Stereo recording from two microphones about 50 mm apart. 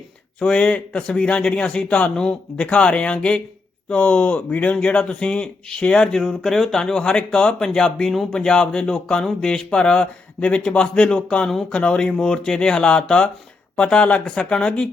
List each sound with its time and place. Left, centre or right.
0.3 s speech: left